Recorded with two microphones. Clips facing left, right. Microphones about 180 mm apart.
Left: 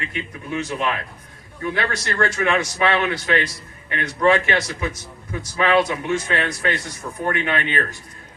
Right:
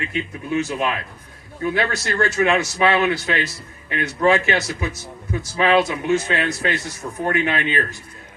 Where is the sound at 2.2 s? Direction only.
25° right (ahead or behind).